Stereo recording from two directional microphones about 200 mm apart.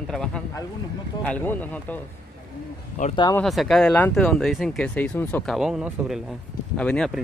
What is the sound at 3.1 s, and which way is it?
Speech, 20° left (ahead or behind).